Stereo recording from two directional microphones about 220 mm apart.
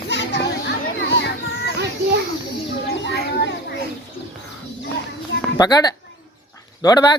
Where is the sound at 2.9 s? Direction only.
50° left (ahead or behind).